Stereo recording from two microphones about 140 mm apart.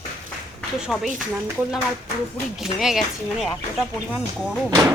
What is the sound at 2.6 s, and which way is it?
Speech, 5° right (ahead or behind).